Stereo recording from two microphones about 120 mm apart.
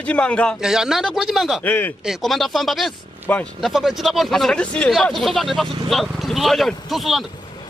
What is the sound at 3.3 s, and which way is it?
Speech, 15° left (ahead or behind).